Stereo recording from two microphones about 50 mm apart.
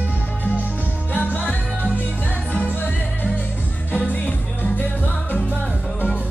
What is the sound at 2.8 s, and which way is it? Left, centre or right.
Music, left.